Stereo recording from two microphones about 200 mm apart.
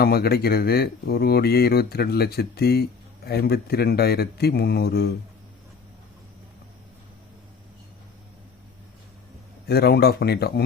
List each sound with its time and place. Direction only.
0.0 s speech: 50° left (ahead or behind)
9.6 s speech: 55° left (ahead or behind)